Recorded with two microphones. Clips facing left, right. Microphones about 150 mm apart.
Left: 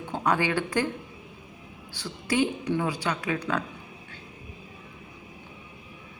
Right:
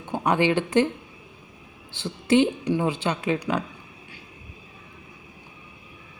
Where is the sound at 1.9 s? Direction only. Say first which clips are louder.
Right 8 dB; 25° right (ahead or behind).